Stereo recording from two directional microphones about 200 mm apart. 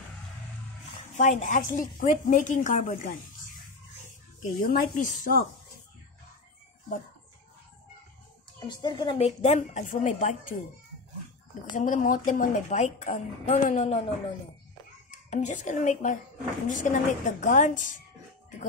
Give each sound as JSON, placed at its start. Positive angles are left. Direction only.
{"t": 1.1, "sound": "speech", "side_deg": 40}
{"t": 8.5, "sound": "speech", "side_deg": 20}
{"t": 11.7, "sound": "speech", "side_deg": 40}
{"t": 15.0, "sound": "speech", "side_deg": 35}